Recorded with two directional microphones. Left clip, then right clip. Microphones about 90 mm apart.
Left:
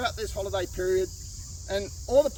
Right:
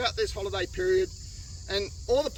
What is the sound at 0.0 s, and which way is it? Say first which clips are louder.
Speech: right 1 dB; 30° left (ahead or behind).